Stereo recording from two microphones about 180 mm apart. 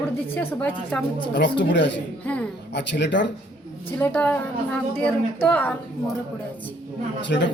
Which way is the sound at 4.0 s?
5° left (ahead or behind).